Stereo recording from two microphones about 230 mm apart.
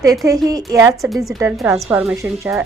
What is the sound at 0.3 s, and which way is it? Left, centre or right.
Speech, centre.